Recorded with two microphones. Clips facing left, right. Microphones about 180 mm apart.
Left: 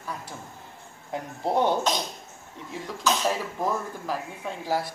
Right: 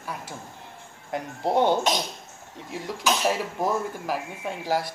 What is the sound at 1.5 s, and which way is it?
Speech, 25° right (ahead or behind).